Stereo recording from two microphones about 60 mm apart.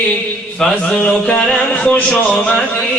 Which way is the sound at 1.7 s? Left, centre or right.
Left.